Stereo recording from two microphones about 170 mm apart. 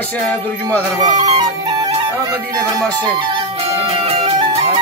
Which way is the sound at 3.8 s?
35° right (ahead or behind).